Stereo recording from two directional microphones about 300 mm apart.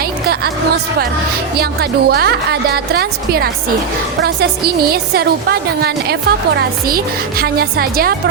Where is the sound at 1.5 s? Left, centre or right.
Right.